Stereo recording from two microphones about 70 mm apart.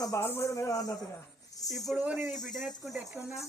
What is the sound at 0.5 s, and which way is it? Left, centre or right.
Speech, left.